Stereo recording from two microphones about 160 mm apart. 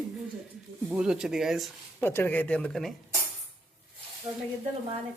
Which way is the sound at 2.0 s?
15° left (ahead or behind).